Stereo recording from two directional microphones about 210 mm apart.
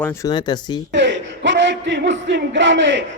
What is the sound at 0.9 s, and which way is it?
Speech, 60° right (ahead or behind).